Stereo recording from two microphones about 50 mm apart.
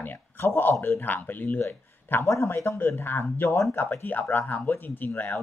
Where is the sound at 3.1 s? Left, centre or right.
Left.